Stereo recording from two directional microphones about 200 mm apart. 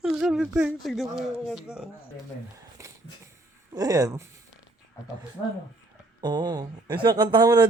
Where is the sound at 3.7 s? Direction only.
20° right (ahead or behind).